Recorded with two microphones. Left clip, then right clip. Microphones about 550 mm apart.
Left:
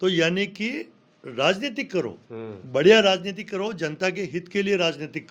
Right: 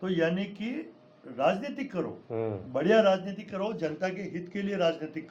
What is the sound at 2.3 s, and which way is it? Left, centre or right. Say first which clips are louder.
Speech: right 4 dB; centre.